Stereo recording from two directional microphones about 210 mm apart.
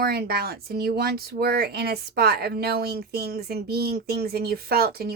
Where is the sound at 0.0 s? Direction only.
45° right (ahead or behind).